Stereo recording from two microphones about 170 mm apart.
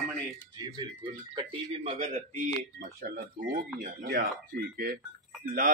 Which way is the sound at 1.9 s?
40° right (ahead or behind).